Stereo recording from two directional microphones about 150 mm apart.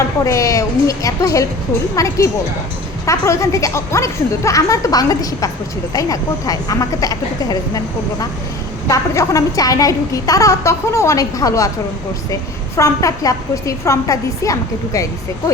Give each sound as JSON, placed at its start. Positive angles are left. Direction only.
{"t": 0.3, "sound": "a woman's voice", "side_deg": 20}
{"t": 8.9, "sound": "a woman's voice", "side_deg": 20}